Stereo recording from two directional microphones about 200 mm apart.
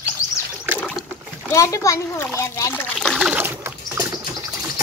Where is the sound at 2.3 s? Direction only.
15° left (ahead or behind); by 4.2 s 15° right (ahead or behind).